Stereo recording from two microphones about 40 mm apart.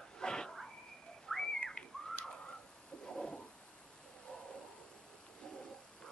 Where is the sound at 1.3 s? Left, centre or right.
Centre.